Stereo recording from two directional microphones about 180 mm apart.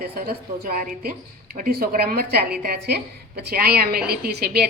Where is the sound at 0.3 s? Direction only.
55° right (ahead or behind).